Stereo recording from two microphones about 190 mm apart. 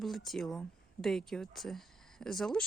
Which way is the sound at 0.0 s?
Centre (ahead or behind).